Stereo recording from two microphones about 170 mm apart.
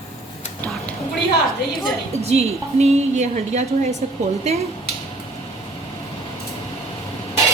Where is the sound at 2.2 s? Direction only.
40° right (ahead or behind).